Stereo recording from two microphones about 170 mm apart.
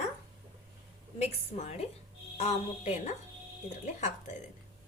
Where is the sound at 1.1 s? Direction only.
40° left (ahead or behind).